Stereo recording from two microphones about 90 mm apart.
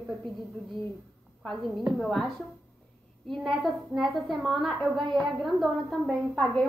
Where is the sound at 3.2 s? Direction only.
Centre (ahead or behind).